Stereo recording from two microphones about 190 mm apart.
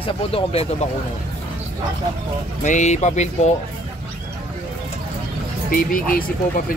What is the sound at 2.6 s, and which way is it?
Speech, 40° left (ahead or behind).